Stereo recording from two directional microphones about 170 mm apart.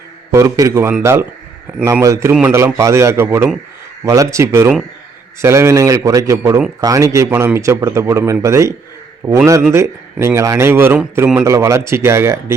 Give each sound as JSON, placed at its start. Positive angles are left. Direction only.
{"t": 0.3, "sound": "a man's voice", "side_deg": -20}